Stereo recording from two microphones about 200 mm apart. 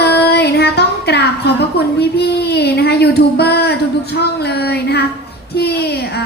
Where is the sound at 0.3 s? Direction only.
55° left (ahead or behind).